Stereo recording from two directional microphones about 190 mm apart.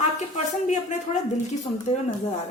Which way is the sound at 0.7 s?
40° left (ahead or behind).